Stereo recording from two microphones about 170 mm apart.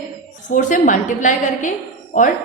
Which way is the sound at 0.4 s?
50° left (ahead or behind).